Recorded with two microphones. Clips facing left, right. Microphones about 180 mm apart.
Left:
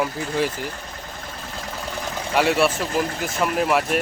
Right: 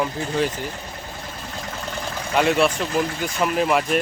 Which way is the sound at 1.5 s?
5° left (ahead or behind).